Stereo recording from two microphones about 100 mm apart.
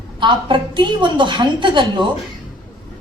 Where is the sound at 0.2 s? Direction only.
50° right (ahead or behind).